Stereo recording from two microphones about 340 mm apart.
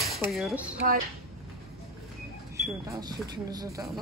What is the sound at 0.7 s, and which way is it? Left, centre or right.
Speech, right.